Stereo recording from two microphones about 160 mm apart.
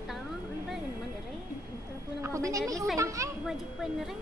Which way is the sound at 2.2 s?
15° right (ahead or behind).